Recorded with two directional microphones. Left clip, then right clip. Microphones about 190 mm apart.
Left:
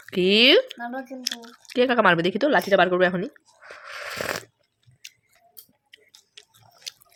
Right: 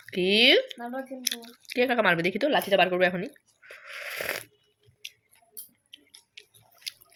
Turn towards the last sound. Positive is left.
turn(degrees=35)  # may be behind; listen again after turning